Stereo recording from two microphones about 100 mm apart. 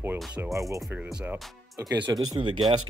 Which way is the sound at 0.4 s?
35° right (ahead or behind).